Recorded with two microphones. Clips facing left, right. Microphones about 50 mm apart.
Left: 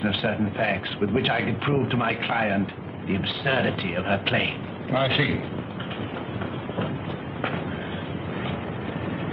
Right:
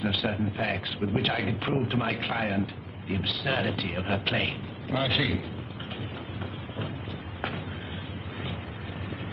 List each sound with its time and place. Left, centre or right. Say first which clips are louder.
0.3 s a man's voice: left 5 dB; centre